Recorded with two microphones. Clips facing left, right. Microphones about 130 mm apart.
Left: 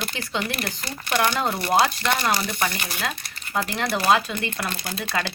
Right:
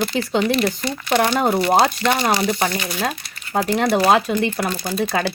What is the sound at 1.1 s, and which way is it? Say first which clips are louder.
Speech: right 5 dB; 50° right (ahead or behind).